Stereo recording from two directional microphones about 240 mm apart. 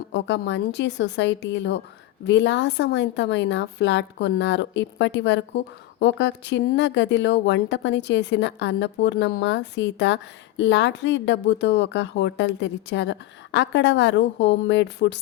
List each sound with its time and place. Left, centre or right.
0.1 s a woman's voice: left